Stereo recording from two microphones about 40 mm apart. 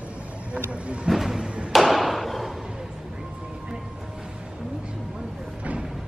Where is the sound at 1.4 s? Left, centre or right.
Right.